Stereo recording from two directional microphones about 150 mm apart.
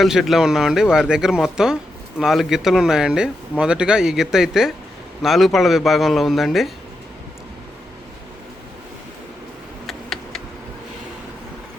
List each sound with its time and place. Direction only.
0.0 s speech: centre (ahead or behind)
9.8 s tick: centre (ahead or behind)